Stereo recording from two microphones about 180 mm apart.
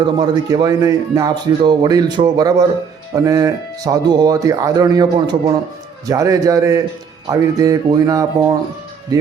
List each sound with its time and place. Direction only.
0.0 s speech: 20° right (ahead or behind)